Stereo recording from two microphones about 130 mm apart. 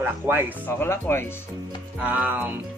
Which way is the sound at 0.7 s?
15° left (ahead or behind).